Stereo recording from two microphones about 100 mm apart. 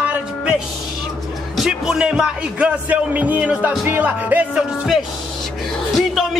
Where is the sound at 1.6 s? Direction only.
5° right (ahead or behind).